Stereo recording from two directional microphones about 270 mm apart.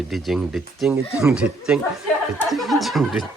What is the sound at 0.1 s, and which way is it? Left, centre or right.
Speech, centre.